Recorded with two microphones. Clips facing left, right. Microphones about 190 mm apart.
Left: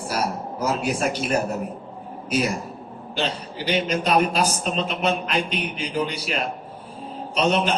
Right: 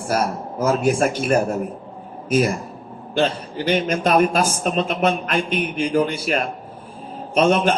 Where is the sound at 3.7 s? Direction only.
50° right (ahead or behind).